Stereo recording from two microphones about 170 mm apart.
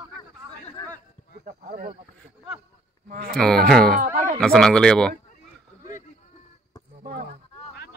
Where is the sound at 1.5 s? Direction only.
50° right (ahead or behind).